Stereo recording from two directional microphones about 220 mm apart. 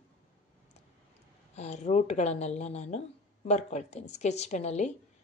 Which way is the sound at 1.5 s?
30° left (ahead or behind).